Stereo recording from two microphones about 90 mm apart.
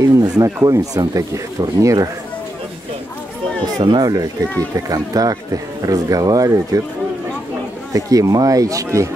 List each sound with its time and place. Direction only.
0.1 s speech: 40° right (ahead or behind)
4.0 s speech: 45° right (ahead or behind)
7.9 s speech: 40° right (ahead or behind)